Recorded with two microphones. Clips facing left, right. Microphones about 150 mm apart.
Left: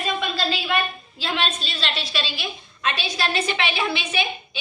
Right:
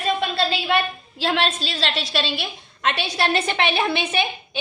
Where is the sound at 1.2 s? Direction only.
85° right.